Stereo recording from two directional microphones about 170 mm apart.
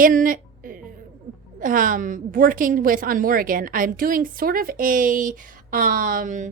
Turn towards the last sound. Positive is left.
turn(degrees=-50)  # may be behind; listen again after turning